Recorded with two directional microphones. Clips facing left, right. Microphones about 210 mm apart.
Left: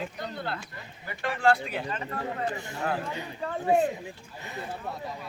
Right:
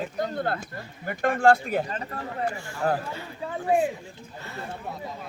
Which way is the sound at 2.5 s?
20° left (ahead or behind).